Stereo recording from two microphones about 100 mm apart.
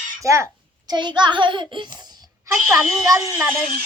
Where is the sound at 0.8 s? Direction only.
50° right (ahead or behind).